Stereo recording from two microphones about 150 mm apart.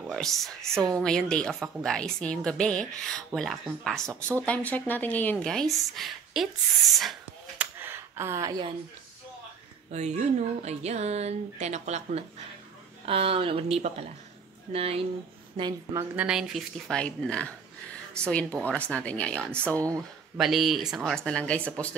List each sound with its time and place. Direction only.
0.1 s a woman's voice: centre (ahead or behind)
7.5 s a sound: 15° right (ahead or behind)
9.8 s speech: 50° right (ahead or behind)
13.0 s speech: 40° right (ahead or behind)
15.5 s a woman's voice: 30° right (ahead or behind)
16.0 s a woman's voice: 10° right (ahead or behind); by 21.9 s 10° left (ahead or behind)